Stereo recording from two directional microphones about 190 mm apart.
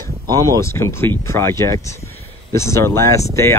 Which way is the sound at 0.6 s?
15° left (ahead or behind).